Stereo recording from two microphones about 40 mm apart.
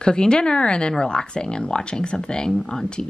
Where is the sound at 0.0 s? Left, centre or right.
Left.